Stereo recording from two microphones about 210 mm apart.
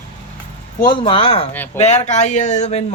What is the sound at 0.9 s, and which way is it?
Speech, 25° left (ahead or behind).